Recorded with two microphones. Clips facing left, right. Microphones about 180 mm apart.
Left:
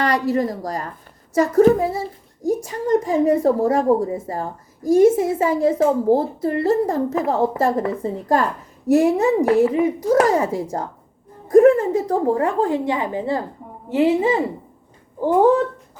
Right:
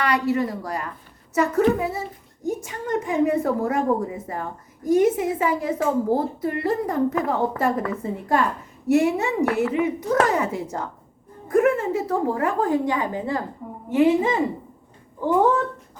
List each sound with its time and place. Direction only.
0.0 s a woman's voice: 40° left (ahead or behind)